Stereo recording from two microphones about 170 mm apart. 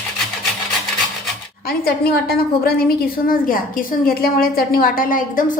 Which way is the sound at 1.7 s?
65° left (ahead or behind).